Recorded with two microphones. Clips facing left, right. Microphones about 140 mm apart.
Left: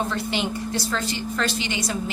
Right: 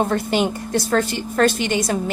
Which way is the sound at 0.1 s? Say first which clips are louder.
Right 6 dB; 50° right (ahead or behind).